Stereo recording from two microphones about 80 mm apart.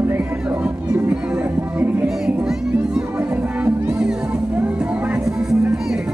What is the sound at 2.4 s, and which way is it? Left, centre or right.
Music, centre.